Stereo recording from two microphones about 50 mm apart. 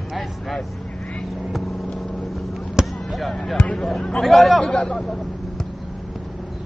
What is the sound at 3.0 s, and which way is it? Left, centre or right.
Basketball bounce, centre.